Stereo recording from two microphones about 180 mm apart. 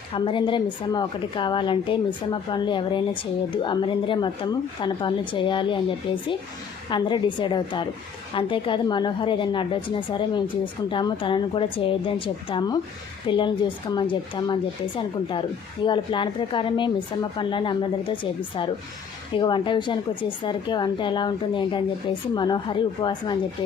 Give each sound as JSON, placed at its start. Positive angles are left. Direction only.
{"t": 0.1, "sound": "speech", "side_deg": 30}